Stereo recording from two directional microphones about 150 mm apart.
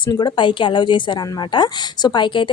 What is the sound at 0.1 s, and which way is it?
Speech, 30° left (ahead or behind).